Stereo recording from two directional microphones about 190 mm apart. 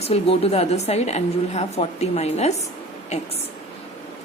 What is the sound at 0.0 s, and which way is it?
A woman's voice, 30° left (ahead or behind).